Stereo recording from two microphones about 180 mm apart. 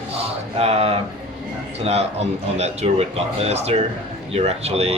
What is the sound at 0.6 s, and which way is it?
Speech, 35° right (ahead or behind).